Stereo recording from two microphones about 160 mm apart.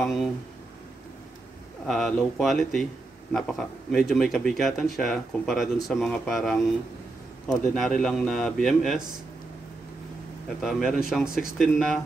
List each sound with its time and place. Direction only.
0.0 s speech: centre (ahead or behind)
1.9 s speech: 5° left (ahead or behind)
7.7 s speech: 5° left (ahead or behind)
10.6 s speech: centre (ahead or behind)